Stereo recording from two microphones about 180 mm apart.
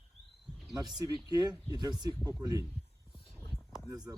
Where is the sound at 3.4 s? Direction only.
15° left (ahead or behind).